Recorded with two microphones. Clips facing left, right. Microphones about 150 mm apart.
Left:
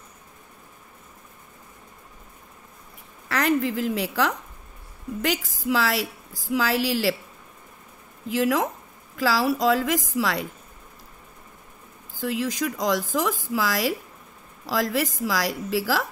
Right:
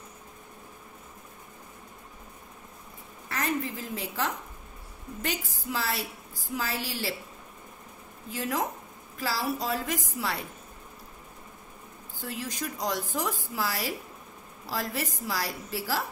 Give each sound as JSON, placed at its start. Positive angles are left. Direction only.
{"t": 3.3, "sound": "a woman's voice", "side_deg": 90}
{"t": 8.3, "sound": "a woman's voice", "side_deg": 90}
{"t": 12.2, "sound": "a woman's voice", "side_deg": 90}